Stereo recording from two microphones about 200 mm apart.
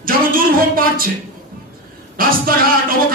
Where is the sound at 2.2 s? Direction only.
45° right (ahead or behind).